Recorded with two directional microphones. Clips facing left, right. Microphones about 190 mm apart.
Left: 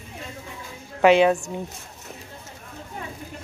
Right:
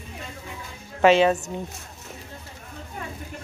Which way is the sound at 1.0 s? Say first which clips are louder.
Left 1 dB; 15° left (ahead or behind).